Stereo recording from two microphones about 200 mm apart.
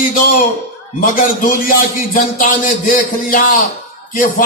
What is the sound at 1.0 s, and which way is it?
Speech, 40° left (ahead or behind).